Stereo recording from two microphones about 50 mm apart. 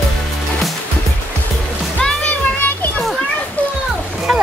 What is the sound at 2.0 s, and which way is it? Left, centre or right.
Music, centre.